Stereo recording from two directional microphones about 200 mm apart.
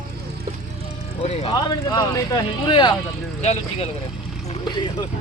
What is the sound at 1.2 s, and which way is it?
Speech, 30° left (ahead or behind).